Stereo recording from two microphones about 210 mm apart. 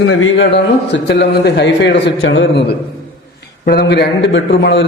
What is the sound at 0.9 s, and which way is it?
A man's voice, 55° left (ahead or behind).